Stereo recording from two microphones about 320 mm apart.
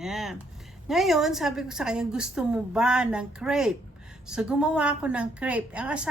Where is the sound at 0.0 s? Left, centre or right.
Centre.